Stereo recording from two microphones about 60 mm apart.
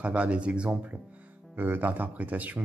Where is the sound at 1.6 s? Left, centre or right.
Right.